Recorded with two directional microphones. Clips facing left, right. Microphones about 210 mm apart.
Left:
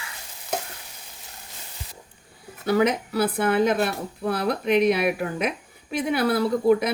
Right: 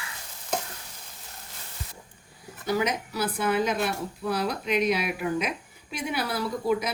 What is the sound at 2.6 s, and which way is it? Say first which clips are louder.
Speech: left 6 dB; 55° left (ahead or behind).